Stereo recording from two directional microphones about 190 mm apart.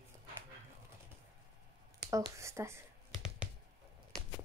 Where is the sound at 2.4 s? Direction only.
15° right (ahead or behind).